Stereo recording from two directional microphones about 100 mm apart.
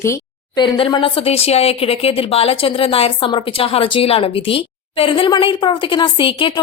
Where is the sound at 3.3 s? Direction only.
65° left (ahead or behind).